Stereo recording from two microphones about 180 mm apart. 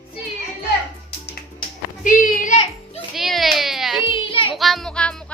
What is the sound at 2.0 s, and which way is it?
Music, 45° left (ahead or behind).